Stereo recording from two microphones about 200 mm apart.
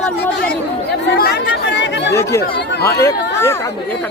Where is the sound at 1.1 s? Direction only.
50° left (ahead or behind).